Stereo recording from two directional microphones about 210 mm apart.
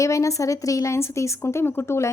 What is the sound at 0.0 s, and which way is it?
Speech, 15° left (ahead or behind).